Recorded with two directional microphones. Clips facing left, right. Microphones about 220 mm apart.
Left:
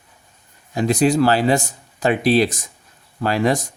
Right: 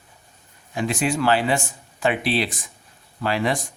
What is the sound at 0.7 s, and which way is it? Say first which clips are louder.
Speech: left 7 dB; 40° left (ahead or behind).